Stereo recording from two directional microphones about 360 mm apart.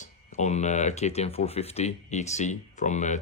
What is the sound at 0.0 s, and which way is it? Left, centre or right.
Speech, centre.